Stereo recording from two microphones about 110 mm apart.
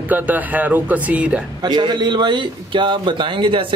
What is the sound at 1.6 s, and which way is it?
A man's voice, 40° right (ahead or behind).